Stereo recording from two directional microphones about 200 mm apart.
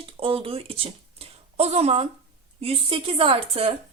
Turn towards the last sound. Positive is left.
turn(degrees=-30)  # may be behind; listen again after turning